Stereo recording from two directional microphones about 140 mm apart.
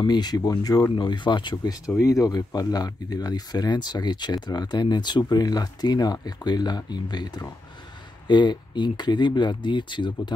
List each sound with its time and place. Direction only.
0.0 s speech: 30° left (ahead or behind)